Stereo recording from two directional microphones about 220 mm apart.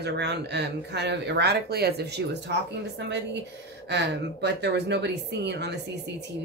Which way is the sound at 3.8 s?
50° right (ahead or behind).